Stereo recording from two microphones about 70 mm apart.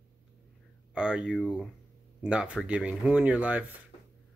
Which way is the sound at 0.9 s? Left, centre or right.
Centre.